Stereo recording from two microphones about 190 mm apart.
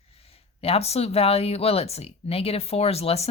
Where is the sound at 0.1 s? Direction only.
30° left (ahead or behind).